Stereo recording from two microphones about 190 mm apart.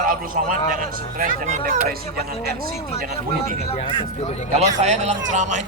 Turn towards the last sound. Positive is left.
turn(degrees=-40)  # may be behind; listen again after turning